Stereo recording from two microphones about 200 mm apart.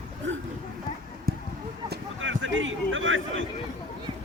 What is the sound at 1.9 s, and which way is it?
A man's voice, 70° right (ahead or behind).